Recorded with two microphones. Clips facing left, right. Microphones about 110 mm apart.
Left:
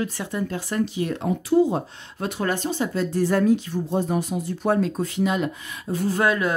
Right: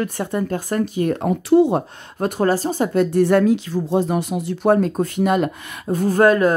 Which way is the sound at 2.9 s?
60° right (ahead or behind).